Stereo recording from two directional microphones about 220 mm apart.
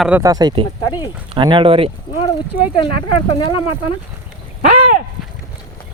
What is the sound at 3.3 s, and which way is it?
Speech, 20° left (ahead or behind).